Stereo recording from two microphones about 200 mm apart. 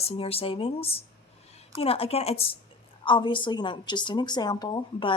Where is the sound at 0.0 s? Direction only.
30° left (ahead or behind).